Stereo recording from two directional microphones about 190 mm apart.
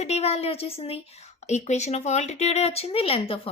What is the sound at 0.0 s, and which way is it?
A woman's voice, 35° left (ahead or behind).